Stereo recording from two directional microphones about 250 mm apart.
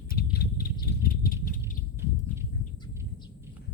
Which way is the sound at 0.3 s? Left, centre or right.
Left.